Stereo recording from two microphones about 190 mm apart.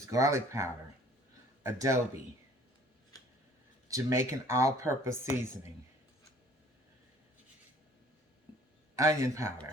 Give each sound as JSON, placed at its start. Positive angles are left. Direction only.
{"t": 0.1, "sound": "speech", "side_deg": -15}
{"t": 3.8, "sound": "speech", "side_deg": -15}
{"t": 9.0, "sound": "speech", "side_deg": -15}